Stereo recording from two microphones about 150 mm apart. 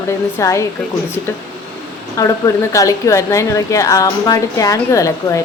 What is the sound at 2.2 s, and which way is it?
A woman's voice, 20° left (ahead or behind).